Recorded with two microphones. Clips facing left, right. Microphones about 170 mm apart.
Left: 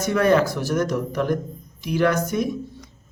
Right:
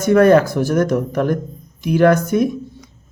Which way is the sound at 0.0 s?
50° right (ahead or behind).